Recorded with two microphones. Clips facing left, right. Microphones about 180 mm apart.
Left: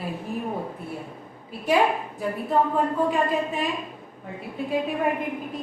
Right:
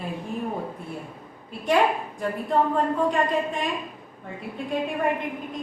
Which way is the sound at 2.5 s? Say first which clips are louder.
Even; 5° left (ahead or behind).